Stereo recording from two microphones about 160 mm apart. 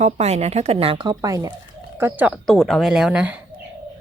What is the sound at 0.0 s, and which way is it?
A woman's voice, 40° right (ahead or behind).